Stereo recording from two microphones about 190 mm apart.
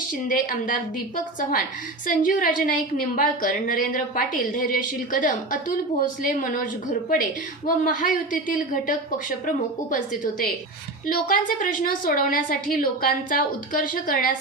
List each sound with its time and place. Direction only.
0.3 s a woman's voice: 45° left (ahead or behind)
7.9 s a woman's voice: 45° left (ahead or behind)
11.3 s a woman's voice: 45° left (ahead or behind)